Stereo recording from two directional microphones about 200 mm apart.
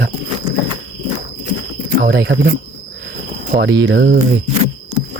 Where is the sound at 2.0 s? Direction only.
55° right (ahead or behind).